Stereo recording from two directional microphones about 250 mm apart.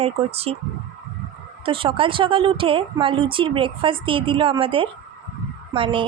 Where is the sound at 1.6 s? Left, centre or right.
Right.